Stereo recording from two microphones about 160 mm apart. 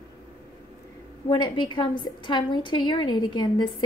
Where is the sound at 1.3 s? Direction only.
30° left (ahead or behind).